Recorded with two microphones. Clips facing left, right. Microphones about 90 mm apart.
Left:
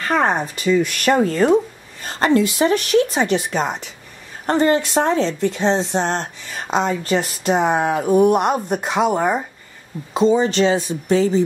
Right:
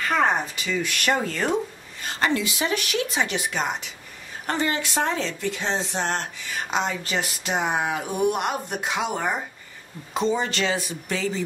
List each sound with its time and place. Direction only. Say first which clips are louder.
0.1 s a woman's voice: left 4 dB; 40° left (ahead or behind)
10.3 s speech: left 9 dB; 25° left (ahead or behind)